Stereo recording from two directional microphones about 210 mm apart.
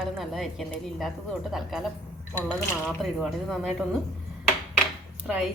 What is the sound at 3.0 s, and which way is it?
Speech, centre (ahead or behind).